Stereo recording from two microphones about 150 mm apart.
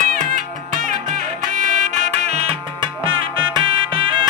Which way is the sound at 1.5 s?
65° right (ahead or behind).